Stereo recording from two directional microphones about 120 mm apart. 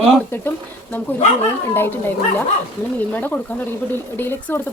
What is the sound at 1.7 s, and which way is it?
A woman's voice, 15° left (ahead or behind).